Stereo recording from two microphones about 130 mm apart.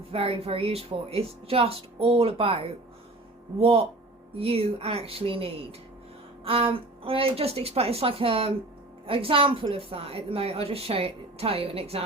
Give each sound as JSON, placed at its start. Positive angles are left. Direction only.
{"t": 0.1, "sound": "a woman's voice", "side_deg": -50}